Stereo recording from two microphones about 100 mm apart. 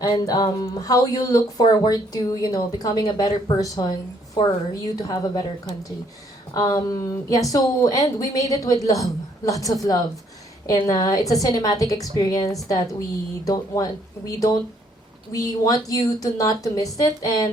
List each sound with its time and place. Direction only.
0.0 s speech: 45° left (ahead or behind)
6.5 s speech: 40° left (ahead or behind)